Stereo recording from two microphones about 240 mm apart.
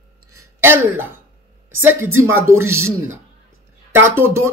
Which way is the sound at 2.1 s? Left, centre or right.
Right.